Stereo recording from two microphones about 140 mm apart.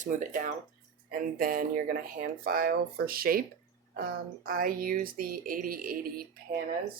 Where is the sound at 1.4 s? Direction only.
90° right.